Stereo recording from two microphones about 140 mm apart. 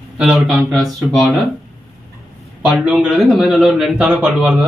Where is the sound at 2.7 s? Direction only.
5° right (ahead or behind).